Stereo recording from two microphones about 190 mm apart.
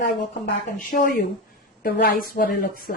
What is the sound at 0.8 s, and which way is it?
A woman's voice, 45° left (ahead or behind).